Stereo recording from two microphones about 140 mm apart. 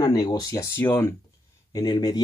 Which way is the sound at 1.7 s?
30° left (ahead or behind).